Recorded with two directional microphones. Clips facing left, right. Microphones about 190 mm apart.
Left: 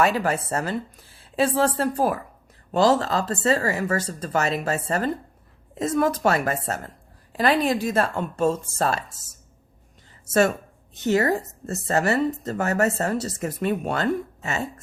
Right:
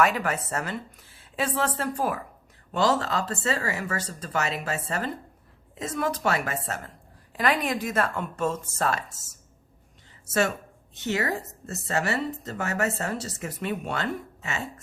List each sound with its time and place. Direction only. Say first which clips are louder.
0.0 s speech: left 3 dB; 30° left (ahead or behind)
7.3 s speech: left 5 dB; 30° left (ahead or behind)
11.0 s a woman's voice: left 7 dB; 40° left (ahead or behind)